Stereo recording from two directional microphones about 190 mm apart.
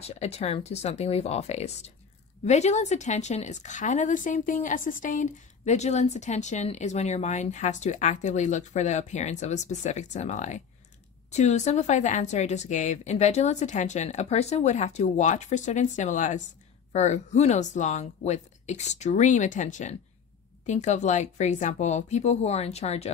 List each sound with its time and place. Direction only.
0.0 s speech: 35° left (ahead or behind)